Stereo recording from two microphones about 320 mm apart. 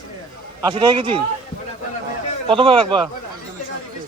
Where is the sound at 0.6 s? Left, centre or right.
Centre.